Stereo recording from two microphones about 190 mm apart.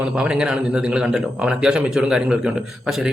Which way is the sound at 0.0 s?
5° right (ahead or behind).